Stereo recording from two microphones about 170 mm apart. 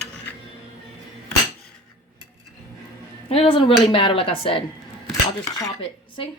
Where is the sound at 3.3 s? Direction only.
35° left (ahead or behind).